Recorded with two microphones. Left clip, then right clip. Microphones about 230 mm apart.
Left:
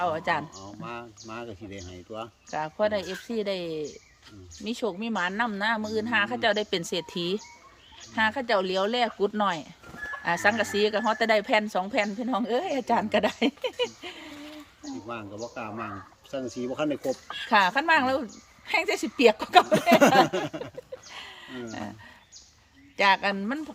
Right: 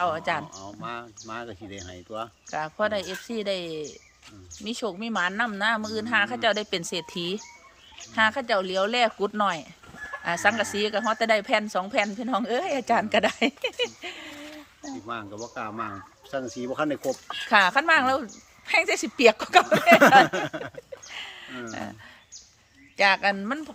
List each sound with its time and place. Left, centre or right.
0.0 s a woman's voice: centre
0.6 s speech: centre
2.5 s a woman's voice: centre
17.0 s speech: right
17.5 s a woman's voice: centre
23.0 s a woman's voice: centre